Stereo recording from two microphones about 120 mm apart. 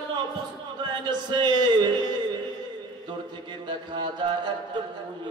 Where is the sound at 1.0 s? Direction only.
40° right (ahead or behind).